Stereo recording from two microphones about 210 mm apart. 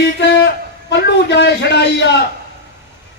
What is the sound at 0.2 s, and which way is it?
A man's voice, 55° left (ahead or behind).